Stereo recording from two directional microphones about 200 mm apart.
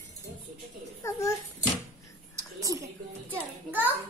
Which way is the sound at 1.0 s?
15° left (ahead or behind).